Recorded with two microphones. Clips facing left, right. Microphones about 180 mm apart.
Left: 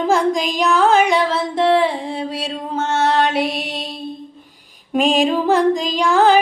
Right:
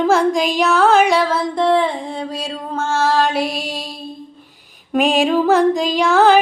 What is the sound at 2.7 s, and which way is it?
Music, 20° left (ahead or behind).